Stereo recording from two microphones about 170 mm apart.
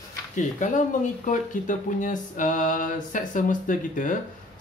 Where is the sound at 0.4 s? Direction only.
45° left (ahead or behind).